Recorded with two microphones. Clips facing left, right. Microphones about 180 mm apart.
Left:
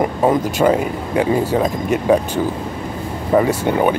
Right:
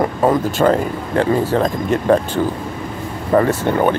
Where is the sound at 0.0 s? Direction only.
15° left (ahead or behind).